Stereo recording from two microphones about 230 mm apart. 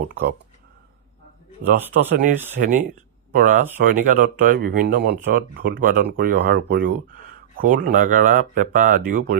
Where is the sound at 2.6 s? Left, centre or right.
Right.